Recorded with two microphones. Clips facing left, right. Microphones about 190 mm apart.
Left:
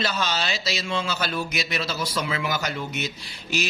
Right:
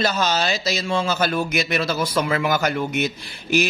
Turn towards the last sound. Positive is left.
turn(degrees=-55)  # may be behind; listen again after turning